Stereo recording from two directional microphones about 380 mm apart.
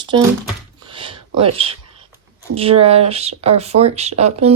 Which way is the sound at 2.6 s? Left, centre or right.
Centre.